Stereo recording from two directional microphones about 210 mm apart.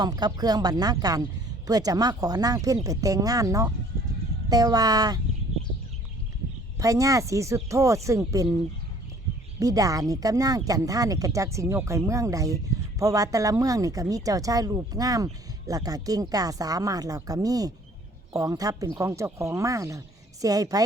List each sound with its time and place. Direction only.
0.0 s speech: 20° right (ahead or behind)
6.7 s speech: 15° right (ahead or behind)
9.6 s speech: 15° right (ahead or behind)